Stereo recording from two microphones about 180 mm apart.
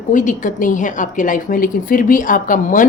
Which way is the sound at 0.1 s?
45° left (ahead or behind).